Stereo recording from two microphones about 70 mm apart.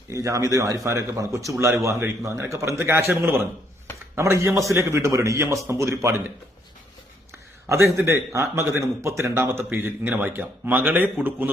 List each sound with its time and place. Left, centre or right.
0.1 s a man's voice: right
7.9 s a man's voice: right